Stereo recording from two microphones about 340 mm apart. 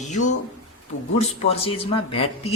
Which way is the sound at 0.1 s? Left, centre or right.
Left.